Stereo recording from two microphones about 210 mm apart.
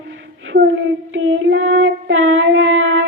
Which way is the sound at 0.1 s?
60° right (ahead or behind).